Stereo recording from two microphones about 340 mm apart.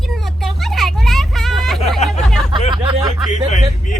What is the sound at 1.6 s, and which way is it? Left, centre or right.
Hubbub, centre.